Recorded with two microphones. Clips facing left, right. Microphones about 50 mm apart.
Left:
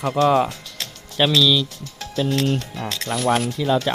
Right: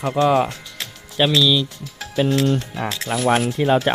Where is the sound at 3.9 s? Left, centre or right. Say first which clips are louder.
Right 3 dB; right.